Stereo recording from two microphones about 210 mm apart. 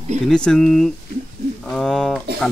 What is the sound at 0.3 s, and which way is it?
Speech, 5° left (ahead or behind).